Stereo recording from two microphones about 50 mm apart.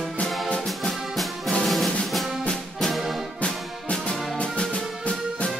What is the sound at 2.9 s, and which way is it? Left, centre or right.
Music, centre.